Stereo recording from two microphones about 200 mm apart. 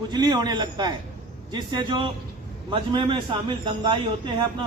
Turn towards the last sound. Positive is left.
turn(degrees=-25)  # may be behind; listen again after turning